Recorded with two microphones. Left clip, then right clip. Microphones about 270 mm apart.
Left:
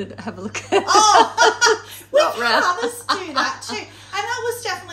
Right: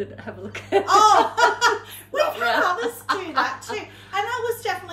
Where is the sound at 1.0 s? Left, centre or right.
Centre.